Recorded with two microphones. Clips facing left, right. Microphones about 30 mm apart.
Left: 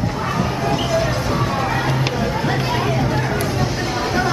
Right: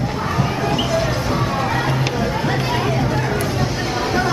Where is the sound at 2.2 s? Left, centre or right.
Centre.